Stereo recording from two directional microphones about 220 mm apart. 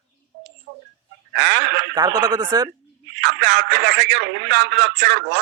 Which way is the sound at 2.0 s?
20° right (ahead or behind).